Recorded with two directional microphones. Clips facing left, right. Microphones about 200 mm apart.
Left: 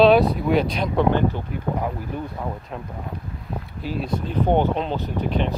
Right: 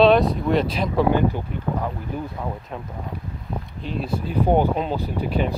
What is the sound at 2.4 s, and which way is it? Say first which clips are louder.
Speech: left 1 dB; 10° left (ahead or behind).